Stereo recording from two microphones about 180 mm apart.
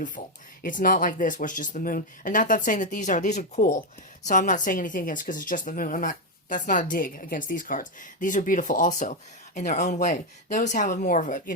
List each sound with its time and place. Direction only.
0.2 s a woman's voice: 45° left (ahead or behind)